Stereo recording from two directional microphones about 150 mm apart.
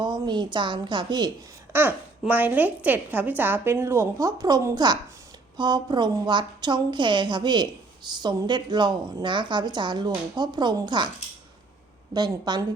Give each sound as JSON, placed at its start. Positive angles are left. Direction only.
{"t": 0.0, "sound": "a woman's voice", "side_deg": -30}
{"t": 1.7, "sound": "a woman's voice", "side_deg": -15}
{"t": 12.1, "sound": "a woman's voice", "side_deg": -25}